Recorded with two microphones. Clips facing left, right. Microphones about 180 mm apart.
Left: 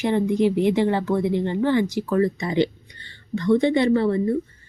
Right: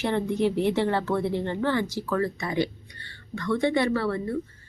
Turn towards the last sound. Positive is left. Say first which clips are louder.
# left 7 dB
turn(degrees=20)  # may be behind; listen again after turning